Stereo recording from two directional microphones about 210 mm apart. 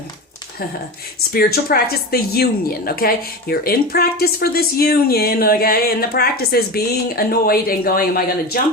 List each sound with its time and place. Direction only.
1.3 s speech: 45° left (ahead or behind)